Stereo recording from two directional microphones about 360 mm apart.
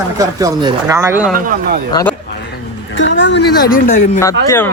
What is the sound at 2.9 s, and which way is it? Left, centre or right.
A woman's voice, left.